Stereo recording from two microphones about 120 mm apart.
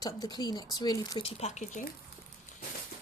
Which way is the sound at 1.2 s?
65° left (ahead or behind).